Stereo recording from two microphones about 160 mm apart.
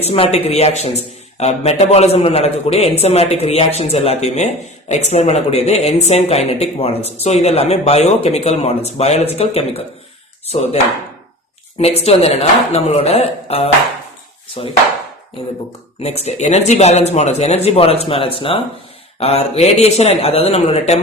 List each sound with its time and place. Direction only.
0.0 s a man's voice: 40° left (ahead or behind)
11.8 s a man's voice: 40° left (ahead or behind)
16.0 s a man's voice: 40° left (ahead or behind)